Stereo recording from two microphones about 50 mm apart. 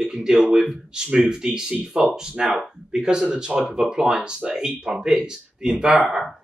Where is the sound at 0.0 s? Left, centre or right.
Centre.